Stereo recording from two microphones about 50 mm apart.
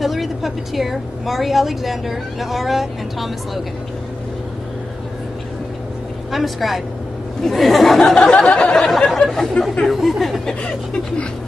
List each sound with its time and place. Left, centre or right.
0.0 s a woman's voice: centre
6.3 s a woman's voice: centre
8.4 s chuckle: centre
8.8 s a woman's voice: centre
10.4 s chuckle: centre